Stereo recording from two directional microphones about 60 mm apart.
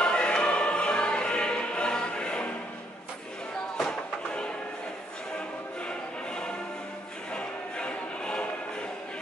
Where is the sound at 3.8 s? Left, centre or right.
Centre.